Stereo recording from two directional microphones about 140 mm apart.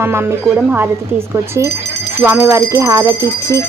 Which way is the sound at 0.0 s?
15° right (ahead or behind).